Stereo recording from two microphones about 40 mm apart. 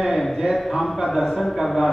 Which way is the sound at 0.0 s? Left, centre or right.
Centre.